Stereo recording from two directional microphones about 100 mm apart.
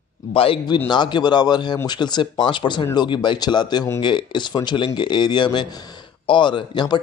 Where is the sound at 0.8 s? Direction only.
45° left (ahead or behind).